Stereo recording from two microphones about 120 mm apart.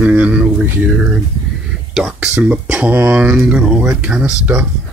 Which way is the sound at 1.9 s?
5° right (ahead or behind).